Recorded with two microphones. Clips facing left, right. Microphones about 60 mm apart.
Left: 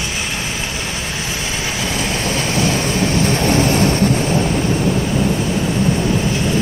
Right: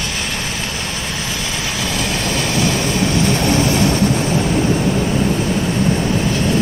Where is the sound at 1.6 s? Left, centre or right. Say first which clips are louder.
Even; left.